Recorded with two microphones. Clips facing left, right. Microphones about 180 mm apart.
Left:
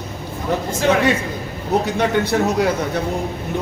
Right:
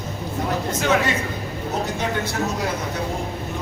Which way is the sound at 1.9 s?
65° left (ahead or behind).